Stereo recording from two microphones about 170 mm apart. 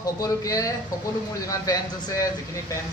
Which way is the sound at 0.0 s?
20° left (ahead or behind).